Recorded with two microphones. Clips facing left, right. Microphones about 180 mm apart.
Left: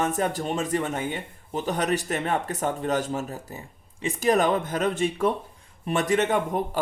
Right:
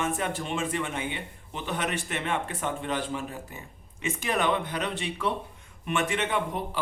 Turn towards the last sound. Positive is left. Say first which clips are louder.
# left 6 dB
turn(degrees=45)  # may be behind; listen again after turning